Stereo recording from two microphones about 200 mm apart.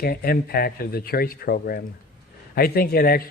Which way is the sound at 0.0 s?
50° left (ahead or behind).